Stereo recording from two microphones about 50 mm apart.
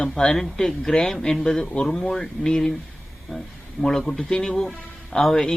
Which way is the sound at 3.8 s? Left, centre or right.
Centre.